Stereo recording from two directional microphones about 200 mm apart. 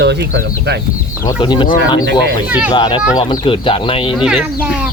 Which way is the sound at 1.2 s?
20° left (ahead or behind).